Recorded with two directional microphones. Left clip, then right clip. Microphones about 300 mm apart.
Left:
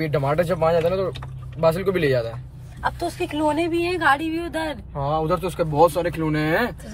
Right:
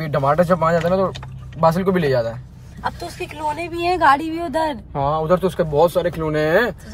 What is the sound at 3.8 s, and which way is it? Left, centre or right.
Speech, centre.